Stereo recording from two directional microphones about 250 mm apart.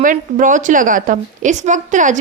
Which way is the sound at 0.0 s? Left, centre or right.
Right.